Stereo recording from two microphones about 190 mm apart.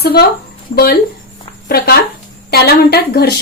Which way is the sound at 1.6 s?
55° left (ahead or behind).